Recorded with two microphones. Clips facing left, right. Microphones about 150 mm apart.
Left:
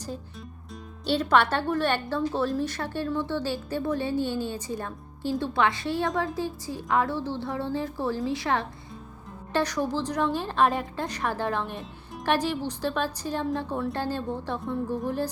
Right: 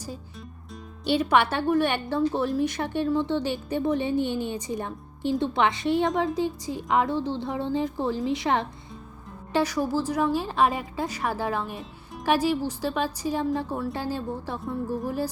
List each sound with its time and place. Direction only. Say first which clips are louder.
1.0 s a woman's voice: right 1 dB; 10° right (ahead or behind)
9.5 s a woman's voice: right 2 dB; 10° right (ahead or behind)